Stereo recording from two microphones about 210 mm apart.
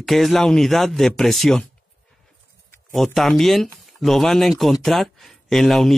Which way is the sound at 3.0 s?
Centre (ahead or behind).